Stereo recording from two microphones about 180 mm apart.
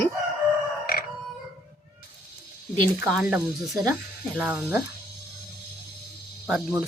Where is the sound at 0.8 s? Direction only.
55° left (ahead or behind).